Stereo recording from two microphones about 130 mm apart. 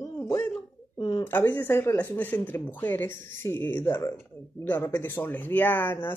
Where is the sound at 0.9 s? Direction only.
35° left (ahead or behind).